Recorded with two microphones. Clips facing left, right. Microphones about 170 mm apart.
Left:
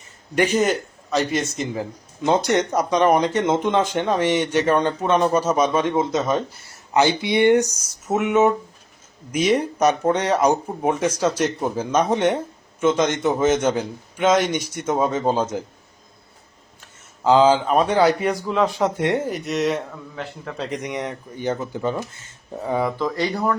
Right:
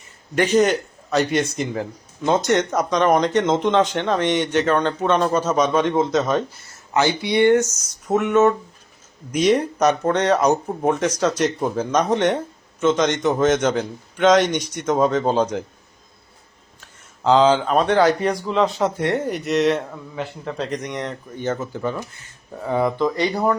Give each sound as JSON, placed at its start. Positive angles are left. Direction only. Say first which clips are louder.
{"t": 0.3, "sound": "a man's voice", "louder": "right 2 dB", "side_deg": 10}
{"t": 2.2, "sound": "a man's voice", "louder": "even", "side_deg": 10}
{"t": 6.9, "sound": "a man's voice", "louder": "left 1 dB", "side_deg": 20}
{"t": 16.8, "sound": "a man's voice", "louder": "even", "side_deg": 5}
{"t": 19.2, "sound": "a man's voice", "louder": "right 3 dB", "side_deg": 0}
{"t": 20.8, "sound": "a man's voice", "louder": "even", "side_deg": 10}